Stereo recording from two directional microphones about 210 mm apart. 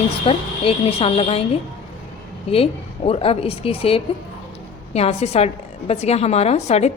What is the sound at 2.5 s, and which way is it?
A woman's voice, 30° left (ahead or behind).